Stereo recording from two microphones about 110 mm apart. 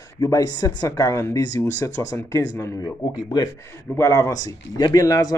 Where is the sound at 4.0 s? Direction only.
30° left (ahead or behind).